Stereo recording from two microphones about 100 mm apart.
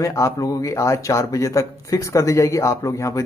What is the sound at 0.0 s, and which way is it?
Speech, 30° left (ahead or behind).